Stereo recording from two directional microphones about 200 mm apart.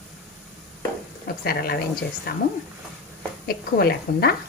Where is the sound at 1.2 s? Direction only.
50° left (ahead or behind).